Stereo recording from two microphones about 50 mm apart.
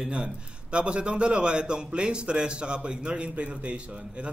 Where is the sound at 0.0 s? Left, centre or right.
Centre.